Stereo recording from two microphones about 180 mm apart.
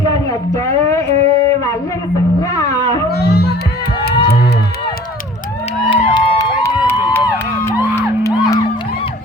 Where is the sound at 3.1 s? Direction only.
60° left (ahead or behind).